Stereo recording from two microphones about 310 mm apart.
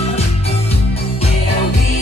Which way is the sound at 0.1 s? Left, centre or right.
Centre.